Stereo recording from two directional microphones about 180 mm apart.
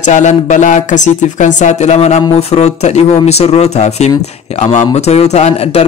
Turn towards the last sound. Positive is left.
turn(degrees=35)  # may be behind; listen again after turning